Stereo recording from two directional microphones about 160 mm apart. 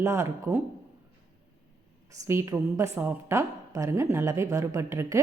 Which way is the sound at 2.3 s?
15° right (ahead or behind).